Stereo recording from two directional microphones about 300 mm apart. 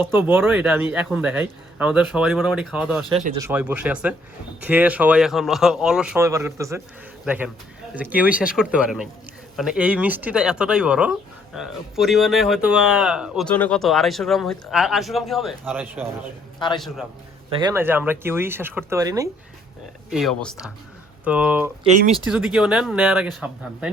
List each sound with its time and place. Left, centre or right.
0.0 s speech: centre
3.1 s speech: centre
16.6 s a man's voice: centre
17.5 s speech: centre
20.1 s speech: centre
21.8 s speech: right
22.3 s speech: centre